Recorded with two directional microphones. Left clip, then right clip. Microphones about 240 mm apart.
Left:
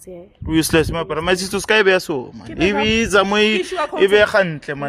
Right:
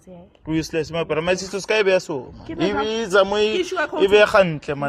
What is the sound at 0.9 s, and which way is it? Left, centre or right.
Speech, centre.